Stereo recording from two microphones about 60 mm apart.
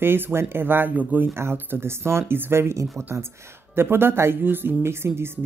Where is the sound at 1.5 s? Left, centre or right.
Right.